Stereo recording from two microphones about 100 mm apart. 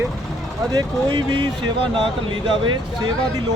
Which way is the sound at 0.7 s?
45° right (ahead or behind).